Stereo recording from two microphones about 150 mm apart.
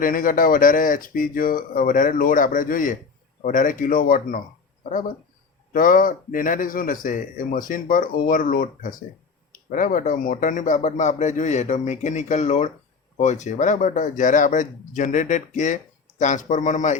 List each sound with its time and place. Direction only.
0.0 s a man's voice: 65° left (ahead or behind)